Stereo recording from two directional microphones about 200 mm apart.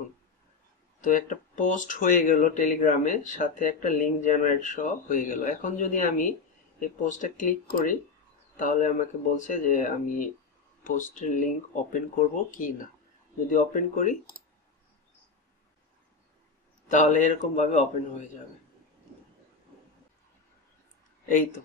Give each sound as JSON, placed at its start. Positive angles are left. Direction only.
{"t": 1.0, "sound": "speech", "side_deg": 40}
{"t": 16.9, "sound": "speech", "side_deg": 40}